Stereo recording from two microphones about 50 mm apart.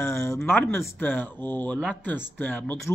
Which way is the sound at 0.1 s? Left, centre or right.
Left.